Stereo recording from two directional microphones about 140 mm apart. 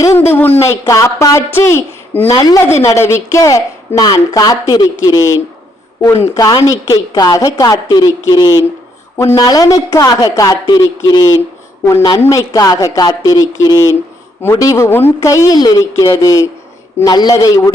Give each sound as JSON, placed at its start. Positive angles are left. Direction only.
{"t": 0.0, "sound": "a woman's voice", "side_deg": 20}